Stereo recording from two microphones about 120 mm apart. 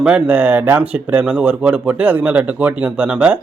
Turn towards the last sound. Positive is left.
turn(degrees=-10)  # may be behind; listen again after turning